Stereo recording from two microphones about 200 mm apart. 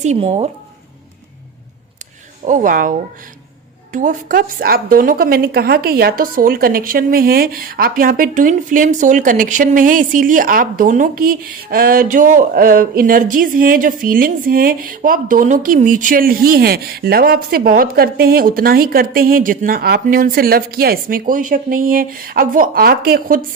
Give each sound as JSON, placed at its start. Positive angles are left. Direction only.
{"t": 0.0, "sound": "speech", "side_deg": -30}
{"t": 2.5, "sound": "a woman's voice", "side_deg": -40}
{"t": 3.9, "sound": "a woman's voice", "side_deg": -40}